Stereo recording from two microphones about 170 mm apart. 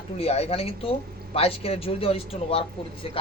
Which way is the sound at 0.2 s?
35° left (ahead or behind).